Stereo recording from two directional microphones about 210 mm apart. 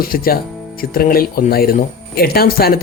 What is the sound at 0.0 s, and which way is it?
Speech, 45° left (ahead or behind).